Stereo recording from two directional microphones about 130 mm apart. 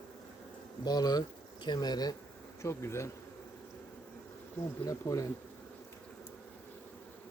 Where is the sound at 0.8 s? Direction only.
30° left (ahead or behind).